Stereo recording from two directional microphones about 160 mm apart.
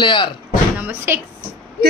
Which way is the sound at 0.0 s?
30° left (ahead or behind).